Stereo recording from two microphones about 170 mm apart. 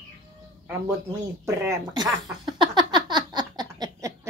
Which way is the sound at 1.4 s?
15° right (ahead or behind).